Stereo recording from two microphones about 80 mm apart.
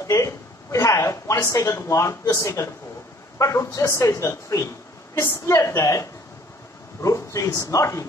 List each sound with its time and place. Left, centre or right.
0.0 s speech: left